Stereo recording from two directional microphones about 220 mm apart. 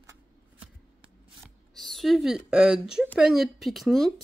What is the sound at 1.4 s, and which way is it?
A woman's voice, centre (ahead or behind).